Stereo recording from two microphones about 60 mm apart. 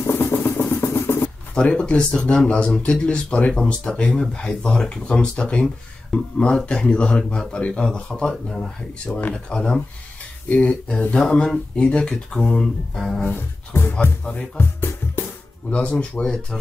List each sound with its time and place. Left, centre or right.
0.1 s vehicle: left
1.5 s speech: centre
10.5 s speech: left
13.2 s a sound: left
14.6 s music: left
15.7 s speech: left